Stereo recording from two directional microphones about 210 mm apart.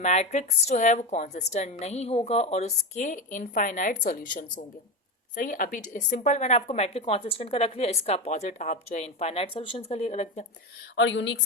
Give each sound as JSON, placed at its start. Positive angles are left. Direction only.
{"t": 0.0, "sound": "a woman's voice", "side_deg": 35}
{"t": 10.9, "sound": "speech", "side_deg": 60}